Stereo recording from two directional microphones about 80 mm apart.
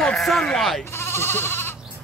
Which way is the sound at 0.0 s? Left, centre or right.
Centre.